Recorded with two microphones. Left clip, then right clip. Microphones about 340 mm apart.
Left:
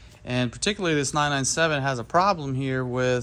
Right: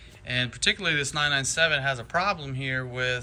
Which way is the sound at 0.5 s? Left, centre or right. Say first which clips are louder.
Even; centre.